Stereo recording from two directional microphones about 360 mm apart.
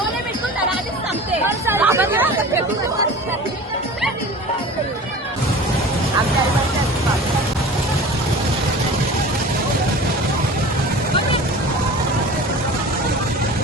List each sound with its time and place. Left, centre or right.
1.5 s hubbub: centre